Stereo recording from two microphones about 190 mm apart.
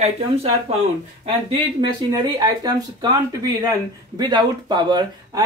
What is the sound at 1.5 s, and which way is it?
Speech, 25° right (ahead or behind).